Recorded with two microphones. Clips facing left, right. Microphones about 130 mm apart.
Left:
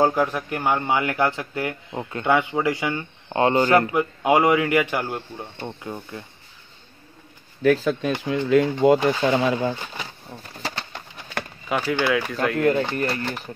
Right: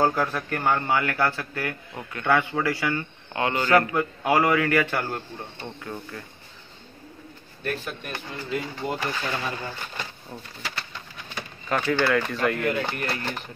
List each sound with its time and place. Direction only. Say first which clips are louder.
0.0 s a man's voice: left 3 dB; 15° left (ahead or behind)
7.6 s speech: left 12 dB; 90° left
10.6 s pigeon: left 5 dB; 30° left (ahead or behind)
11.7 s speech: left 1 dB; 10° left (ahead or behind)